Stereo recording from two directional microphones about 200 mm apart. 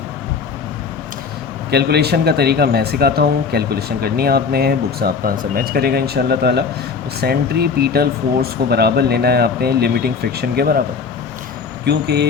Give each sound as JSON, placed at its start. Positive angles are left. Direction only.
{"t": 1.7, "sound": "speech", "side_deg": -55}
{"t": 11.9, "sound": "speech", "side_deg": -55}